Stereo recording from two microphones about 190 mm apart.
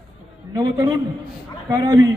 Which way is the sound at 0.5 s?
20° right (ahead or behind).